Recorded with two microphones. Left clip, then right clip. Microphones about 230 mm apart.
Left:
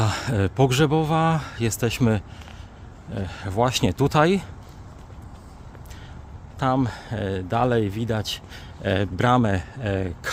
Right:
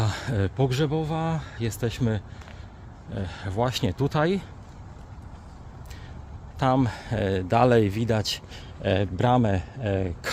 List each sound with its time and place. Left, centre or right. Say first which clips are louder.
0.0 s a man's voice: left 4 dB; centre
3.1 s speech: left 3 dB; centre
6.6 s speech: even; centre
8.5 s speech: left 1 dB; centre